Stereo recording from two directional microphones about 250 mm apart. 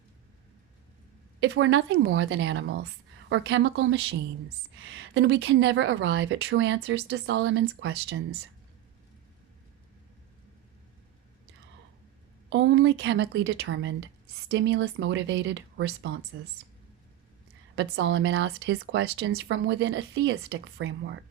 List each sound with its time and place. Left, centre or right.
1.4 s a woman's voice: right
12.5 s a woman's voice: right
17.7 s a woman's voice: right